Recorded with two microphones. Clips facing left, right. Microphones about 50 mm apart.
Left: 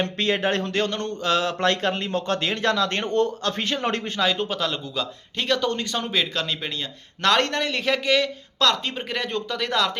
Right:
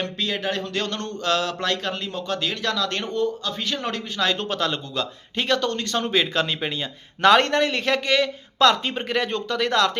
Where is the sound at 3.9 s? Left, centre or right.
Left.